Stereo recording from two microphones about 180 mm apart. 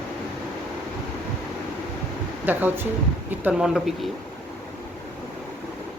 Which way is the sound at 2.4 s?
10° right (ahead or behind).